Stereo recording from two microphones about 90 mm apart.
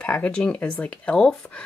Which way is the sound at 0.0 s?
15° left (ahead or behind).